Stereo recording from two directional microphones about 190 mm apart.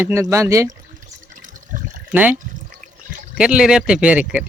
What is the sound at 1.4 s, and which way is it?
Water, 45° right (ahead or behind).